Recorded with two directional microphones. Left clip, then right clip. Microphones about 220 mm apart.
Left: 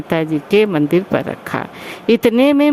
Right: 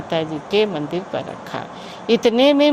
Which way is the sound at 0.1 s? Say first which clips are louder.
Left 5 dB; 65° left (ahead or behind).